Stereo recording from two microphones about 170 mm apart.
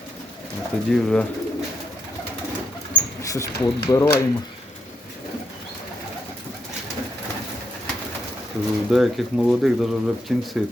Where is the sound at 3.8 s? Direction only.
15° left (ahead or behind).